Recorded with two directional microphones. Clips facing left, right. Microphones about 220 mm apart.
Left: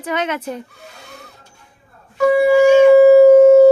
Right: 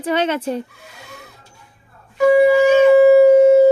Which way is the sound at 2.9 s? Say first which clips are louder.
Left 2 dB; 15° right (ahead or behind).